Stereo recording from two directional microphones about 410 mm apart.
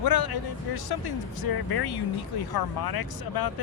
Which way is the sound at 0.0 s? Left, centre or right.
Left.